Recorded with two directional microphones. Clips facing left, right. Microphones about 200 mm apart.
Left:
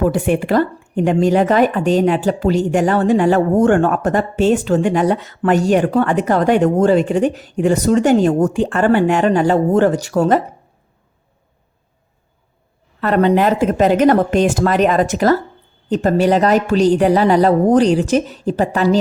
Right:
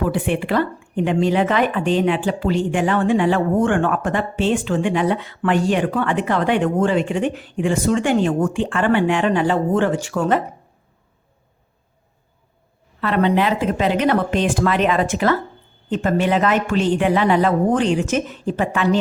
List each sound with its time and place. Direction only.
0.1 s a woman's voice: 45° left (ahead or behind)
13.0 s a woman's voice: 45° left (ahead or behind)